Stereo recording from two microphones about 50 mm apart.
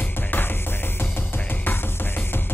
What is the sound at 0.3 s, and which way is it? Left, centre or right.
Music, left.